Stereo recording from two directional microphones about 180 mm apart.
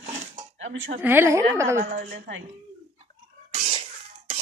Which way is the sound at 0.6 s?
90° right.